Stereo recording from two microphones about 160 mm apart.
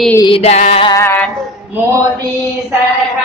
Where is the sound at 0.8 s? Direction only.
20° left (ahead or behind).